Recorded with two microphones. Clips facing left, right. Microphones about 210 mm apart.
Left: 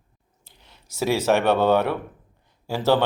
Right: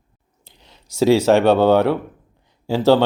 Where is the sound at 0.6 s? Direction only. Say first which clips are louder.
Right 9 dB; 15° right (ahead or behind).